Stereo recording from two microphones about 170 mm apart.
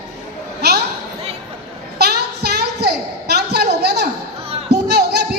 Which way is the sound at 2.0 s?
75° right (ahead or behind).